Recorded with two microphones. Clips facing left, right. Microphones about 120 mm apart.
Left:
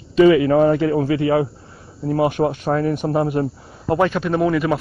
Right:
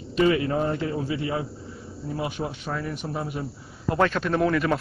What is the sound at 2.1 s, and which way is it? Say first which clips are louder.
A man's voice: left 12 dB; 65° left (ahead or behind).